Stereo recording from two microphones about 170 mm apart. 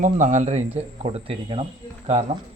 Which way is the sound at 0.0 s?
45° right (ahead or behind).